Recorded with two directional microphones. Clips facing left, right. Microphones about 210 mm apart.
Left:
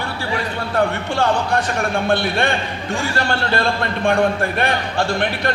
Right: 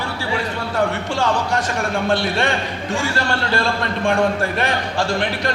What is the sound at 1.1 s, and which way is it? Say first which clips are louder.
Speech: left 3 dB; 55° left (ahead or behind).